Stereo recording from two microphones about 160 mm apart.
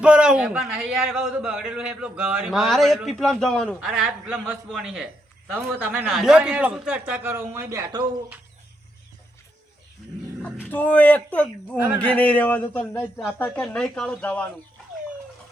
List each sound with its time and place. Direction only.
0.0 s a man's voice: 5° right (ahead or behind); by 8.0 s 20° right (ahead or behind)
10.7 s a man's voice: 10° left (ahead or behind)